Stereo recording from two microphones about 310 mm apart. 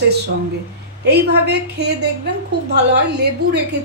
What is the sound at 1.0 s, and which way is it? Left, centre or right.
A woman's voice, right.